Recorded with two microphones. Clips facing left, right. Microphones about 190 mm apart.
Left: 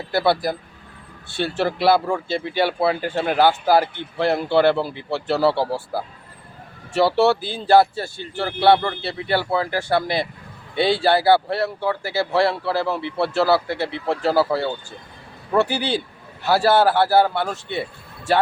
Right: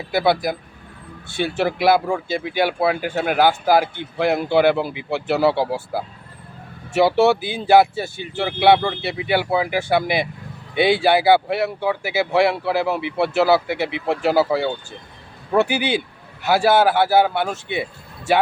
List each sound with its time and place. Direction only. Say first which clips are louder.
0.1 s speech: right 1 dB; 15° right (ahead or behind)